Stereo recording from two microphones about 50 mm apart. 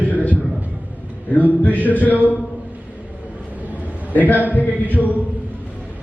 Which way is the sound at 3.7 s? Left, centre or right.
Left.